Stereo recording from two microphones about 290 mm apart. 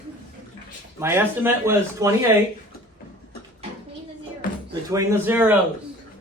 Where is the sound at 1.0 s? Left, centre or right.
Centre.